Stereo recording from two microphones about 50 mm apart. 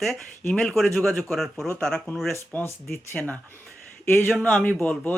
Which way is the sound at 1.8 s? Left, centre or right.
Centre.